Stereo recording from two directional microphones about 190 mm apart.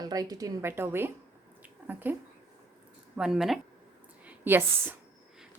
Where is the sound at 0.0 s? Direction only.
20° right (ahead or behind).